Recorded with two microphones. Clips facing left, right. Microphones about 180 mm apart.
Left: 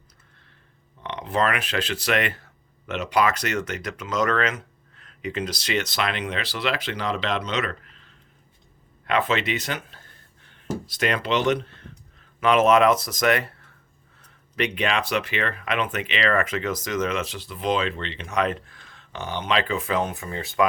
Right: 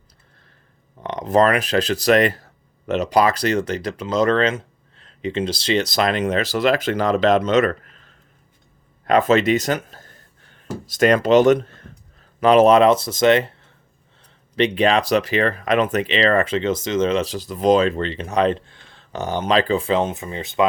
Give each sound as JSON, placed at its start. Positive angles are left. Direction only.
{"t": 1.0, "sound": "speech", "side_deg": -40}
{"t": 12.4, "sound": "speech", "side_deg": -35}
{"t": 14.2, "sound": "a sound", "side_deg": -30}
{"t": 14.8, "sound": "speech", "side_deg": -35}